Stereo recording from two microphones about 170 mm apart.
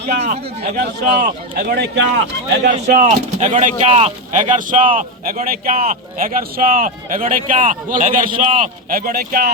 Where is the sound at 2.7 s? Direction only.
50° right (ahead or behind).